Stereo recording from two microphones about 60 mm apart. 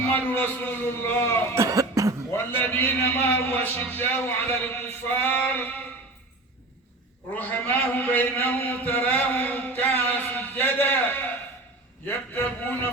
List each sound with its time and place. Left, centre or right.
0.1 s a man's voice: left
1.5 s cough: right
2.3 s a man's voice: left
7.3 s a man's voice: left